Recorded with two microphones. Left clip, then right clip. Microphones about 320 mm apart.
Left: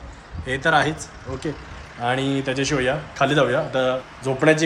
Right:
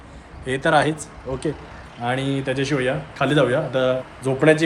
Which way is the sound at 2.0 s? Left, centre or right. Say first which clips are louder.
Left 1 dB; centre.